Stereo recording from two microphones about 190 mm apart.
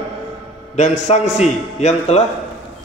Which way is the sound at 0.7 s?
40° left (ahead or behind).